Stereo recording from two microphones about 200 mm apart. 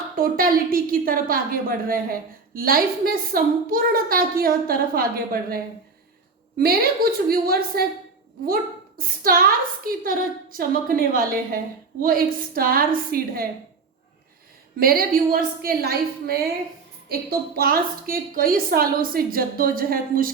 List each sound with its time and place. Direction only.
0.2 s a woman's voice: 45° right (ahead or behind)
6.6 s a woman's voice: 50° right (ahead or behind)
9.0 s a woman's voice: 45° right (ahead or behind)
14.8 s a woman's voice: 50° right (ahead or behind)